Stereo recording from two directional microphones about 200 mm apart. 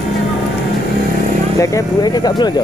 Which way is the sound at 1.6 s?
20° left (ahead or behind).